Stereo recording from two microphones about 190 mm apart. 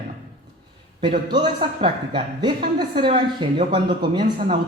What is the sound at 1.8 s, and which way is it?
Speech, 25° right (ahead or behind).